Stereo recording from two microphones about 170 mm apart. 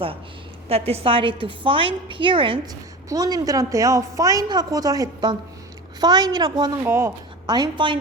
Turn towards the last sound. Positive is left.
turn(degrees=-30)  # may be behind; listen again after turning